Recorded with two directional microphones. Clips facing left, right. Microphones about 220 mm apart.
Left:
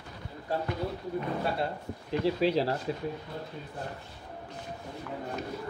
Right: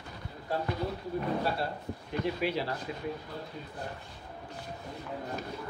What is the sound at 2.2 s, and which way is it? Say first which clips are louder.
Speech: left 5 dB; 35° left (ahead or behind).